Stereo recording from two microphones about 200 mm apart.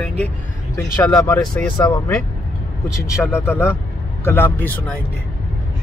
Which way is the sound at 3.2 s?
10° left (ahead or behind).